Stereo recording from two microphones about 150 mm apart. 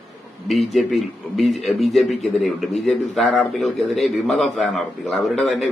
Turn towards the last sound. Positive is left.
turn(degrees=5)  # may be behind; listen again after turning